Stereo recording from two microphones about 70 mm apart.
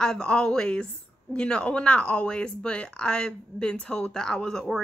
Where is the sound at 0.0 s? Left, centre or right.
Centre.